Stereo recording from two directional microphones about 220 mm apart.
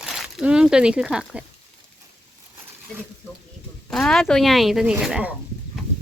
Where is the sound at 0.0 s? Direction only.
Centre (ahead or behind).